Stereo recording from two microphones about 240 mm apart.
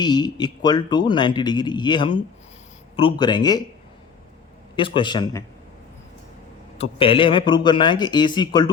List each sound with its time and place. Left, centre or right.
0.0 s speech: centre
4.8 s a man's voice: centre
7.0 s a man's voice: left